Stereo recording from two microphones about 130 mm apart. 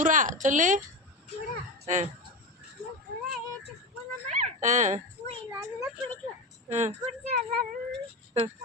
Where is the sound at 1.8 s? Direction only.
70° right (ahead or behind).